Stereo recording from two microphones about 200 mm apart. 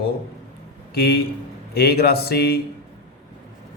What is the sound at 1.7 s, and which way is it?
Mantra, 50° left (ahead or behind).